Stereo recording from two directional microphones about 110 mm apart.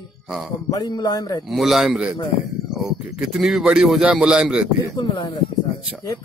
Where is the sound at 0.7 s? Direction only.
40° left (ahead or behind).